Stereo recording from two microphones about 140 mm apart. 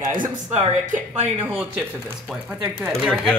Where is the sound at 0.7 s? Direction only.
55° right (ahead or behind).